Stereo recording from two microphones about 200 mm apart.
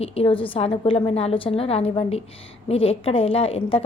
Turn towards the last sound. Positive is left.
turn(degrees=30)  # may be behind; listen again after turning